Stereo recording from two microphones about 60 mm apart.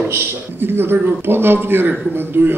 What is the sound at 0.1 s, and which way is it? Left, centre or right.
A man's voice, right.